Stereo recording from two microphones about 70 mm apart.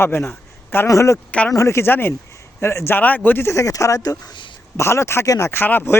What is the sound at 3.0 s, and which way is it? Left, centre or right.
Speech, left.